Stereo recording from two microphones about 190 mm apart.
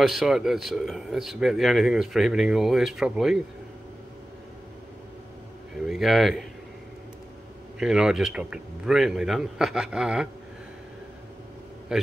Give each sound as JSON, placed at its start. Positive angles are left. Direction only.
{"t": 0.0, "sound": "speech", "side_deg": 0}
{"t": 5.9, "sound": "a man's voice", "side_deg": 0}
{"t": 7.8, "sound": "speech", "side_deg": -5}
{"t": 11.9, "sound": "a man's voice", "side_deg": -5}